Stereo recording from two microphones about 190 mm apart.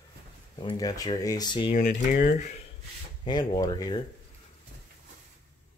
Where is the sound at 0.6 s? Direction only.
20° left (ahead or behind).